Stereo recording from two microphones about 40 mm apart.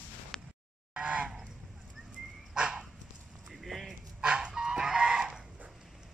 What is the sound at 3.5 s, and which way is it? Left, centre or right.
Clip-clop, centre.